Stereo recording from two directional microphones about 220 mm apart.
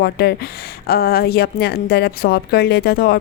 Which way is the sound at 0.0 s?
45° left (ahead or behind).